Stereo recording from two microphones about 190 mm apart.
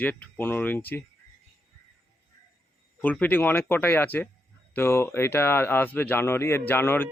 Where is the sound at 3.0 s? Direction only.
10° left (ahead or behind).